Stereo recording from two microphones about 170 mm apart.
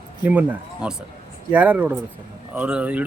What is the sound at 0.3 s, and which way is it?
Speech, 10° right (ahead or behind).